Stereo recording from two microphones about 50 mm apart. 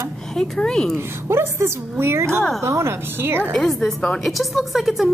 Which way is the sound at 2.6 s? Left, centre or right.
Right.